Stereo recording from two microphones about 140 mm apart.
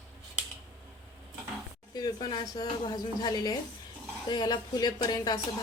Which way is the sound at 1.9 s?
30° left (ahead or behind).